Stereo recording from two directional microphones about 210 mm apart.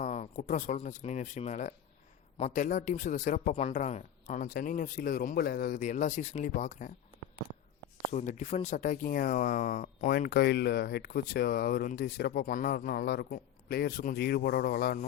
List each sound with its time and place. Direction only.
0.0 s speech: 35° left (ahead or behind)
8.1 s speech: 35° left (ahead or behind)